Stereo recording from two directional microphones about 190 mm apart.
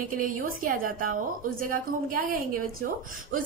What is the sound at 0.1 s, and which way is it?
A woman's voice, 45° right (ahead or behind).